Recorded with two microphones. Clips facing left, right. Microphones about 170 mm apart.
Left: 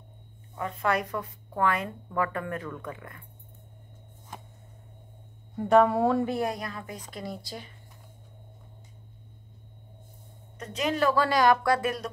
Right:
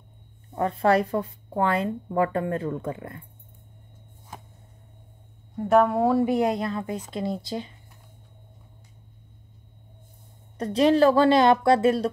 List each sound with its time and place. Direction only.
0.6 s a woman's voice: 35° right (ahead or behind)
5.6 s speech: centre (ahead or behind)
6.2 s a woman's voice: 20° right (ahead or behind)
10.6 s a woman's voice: 30° right (ahead or behind)